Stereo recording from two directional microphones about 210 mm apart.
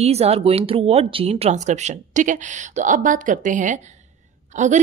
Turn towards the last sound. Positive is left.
turn(degrees=-35)  # may be behind; listen again after turning